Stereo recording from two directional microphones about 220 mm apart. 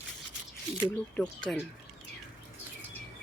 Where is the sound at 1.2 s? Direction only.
Centre (ahead or behind).